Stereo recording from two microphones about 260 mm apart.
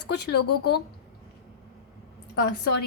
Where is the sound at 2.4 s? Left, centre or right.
Left.